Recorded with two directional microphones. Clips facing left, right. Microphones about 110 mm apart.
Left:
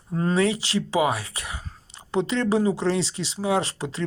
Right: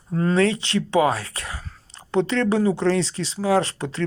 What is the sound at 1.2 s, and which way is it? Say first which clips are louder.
Speech: right 2 dB; 30° right (ahead or behind).